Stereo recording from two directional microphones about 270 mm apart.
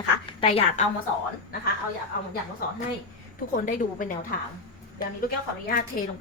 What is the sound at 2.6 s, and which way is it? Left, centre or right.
Speech, left.